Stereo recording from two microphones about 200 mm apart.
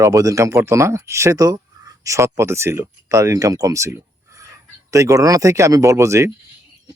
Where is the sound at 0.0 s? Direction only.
15° right (ahead or behind).